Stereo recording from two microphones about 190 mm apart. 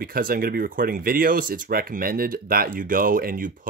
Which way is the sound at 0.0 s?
50° right (ahead or behind).